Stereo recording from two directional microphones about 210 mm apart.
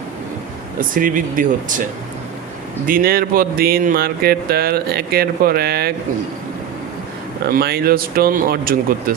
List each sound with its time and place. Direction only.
0.8 s speech: 40° right (ahead or behind)
7.4 s speech: 50° right (ahead or behind)